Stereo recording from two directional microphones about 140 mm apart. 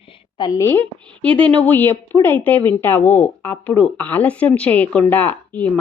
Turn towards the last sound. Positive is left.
turn(degrees=10)  # may be behind; listen again after turning